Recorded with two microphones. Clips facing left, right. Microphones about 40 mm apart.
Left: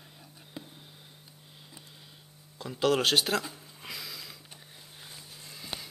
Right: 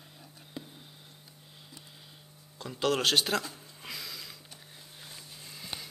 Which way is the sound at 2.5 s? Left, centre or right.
Centre.